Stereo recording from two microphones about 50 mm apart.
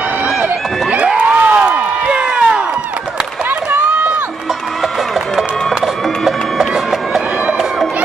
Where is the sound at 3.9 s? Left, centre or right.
Right.